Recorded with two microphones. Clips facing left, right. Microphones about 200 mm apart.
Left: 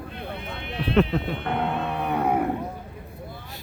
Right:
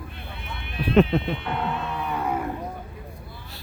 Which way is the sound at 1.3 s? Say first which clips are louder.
Left 2 dB; 55° left (ahead or behind).